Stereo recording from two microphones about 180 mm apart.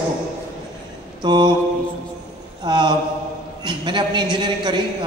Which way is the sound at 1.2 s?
25° right (ahead or behind).